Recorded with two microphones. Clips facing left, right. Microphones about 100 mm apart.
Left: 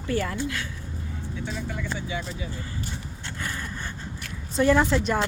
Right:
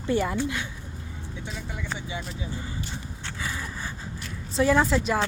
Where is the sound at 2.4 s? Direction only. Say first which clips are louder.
Even; 15° right (ahead or behind).